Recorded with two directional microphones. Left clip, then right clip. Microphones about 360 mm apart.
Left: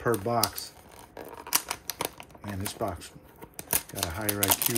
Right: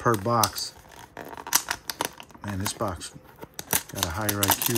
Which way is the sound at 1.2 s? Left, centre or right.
Centre.